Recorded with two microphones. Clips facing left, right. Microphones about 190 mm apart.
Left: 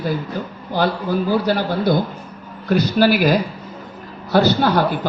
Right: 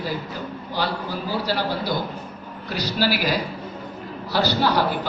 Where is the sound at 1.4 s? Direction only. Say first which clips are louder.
Left 6 dB; 55° left (ahead or behind).